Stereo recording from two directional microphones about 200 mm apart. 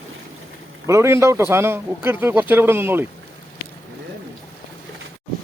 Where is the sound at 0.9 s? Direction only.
15° right (ahead or behind).